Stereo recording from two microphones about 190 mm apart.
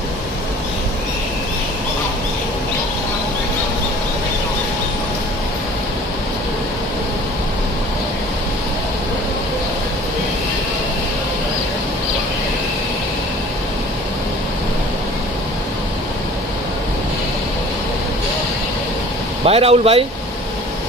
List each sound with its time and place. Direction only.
19.4 s speech: 30° right (ahead or behind)